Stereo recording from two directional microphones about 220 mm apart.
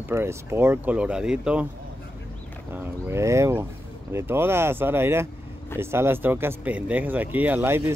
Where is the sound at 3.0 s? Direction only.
15° right (ahead or behind).